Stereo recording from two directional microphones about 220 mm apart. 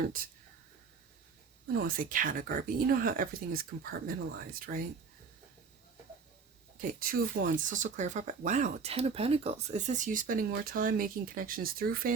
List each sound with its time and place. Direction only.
1.7 s speech: 40° right (ahead or behind)
7.0 s speech: 40° right (ahead or behind)